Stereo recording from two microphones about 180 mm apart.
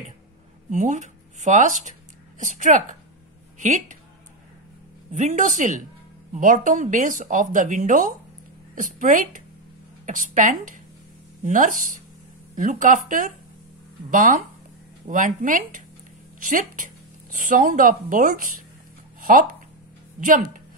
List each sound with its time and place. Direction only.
0.7 s speech: 40° right (ahead or behind)
5.1 s speech: 45° right (ahead or behind)